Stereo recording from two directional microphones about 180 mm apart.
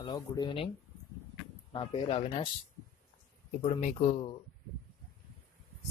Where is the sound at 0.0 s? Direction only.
25° left (ahead or behind).